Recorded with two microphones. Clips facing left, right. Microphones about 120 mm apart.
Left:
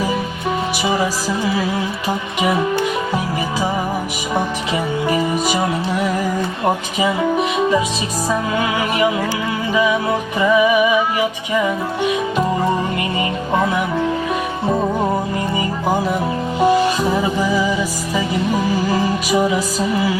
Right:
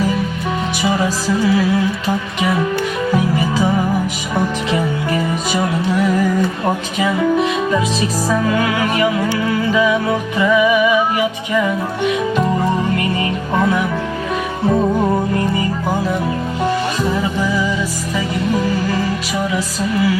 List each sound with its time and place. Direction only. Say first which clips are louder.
1.0 s music: right 3 dB; 10° left (ahead or behind)
4.4 s music: right 3 dB; 15° left (ahead or behind)
6.7 s music: even; 15° left (ahead or behind)
13.5 s music: right 1 dB; 15° left (ahead or behind)
16.6 s music: left 6 dB; 15° left (ahead or behind)
18.9 s music: left 2 dB; 15° left (ahead or behind)